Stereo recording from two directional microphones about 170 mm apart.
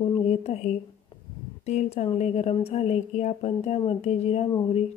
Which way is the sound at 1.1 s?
30° left (ahead or behind).